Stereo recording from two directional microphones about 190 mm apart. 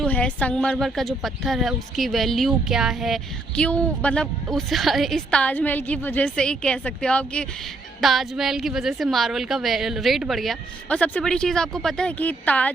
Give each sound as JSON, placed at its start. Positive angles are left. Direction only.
{"t": 0.0, "sound": "speech", "side_deg": 5}